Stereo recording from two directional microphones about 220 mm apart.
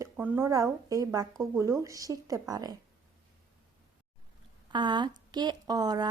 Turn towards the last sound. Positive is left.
turn(degrees=-15)  # may be behind; listen again after turning